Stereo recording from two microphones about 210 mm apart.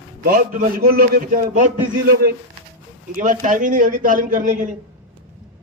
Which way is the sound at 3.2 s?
40° right (ahead or behind).